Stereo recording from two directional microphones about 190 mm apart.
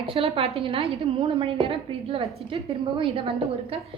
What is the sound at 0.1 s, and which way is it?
A woman's voice, 30° right (ahead or behind).